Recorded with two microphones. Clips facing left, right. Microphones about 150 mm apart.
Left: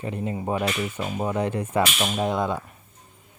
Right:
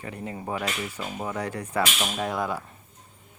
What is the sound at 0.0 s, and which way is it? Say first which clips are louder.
Speech: left 6 dB; 20° left (ahead or behind).